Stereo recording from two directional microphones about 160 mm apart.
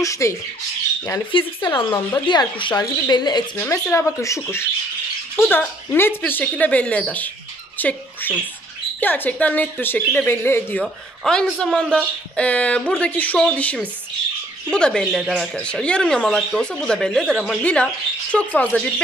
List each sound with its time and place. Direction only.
0.0 s a woman's voice: 20° left (ahead or behind)
1.8 s a woman's voice: 30° left (ahead or behind)
3.5 s a woman's voice: 10° left (ahead or behind)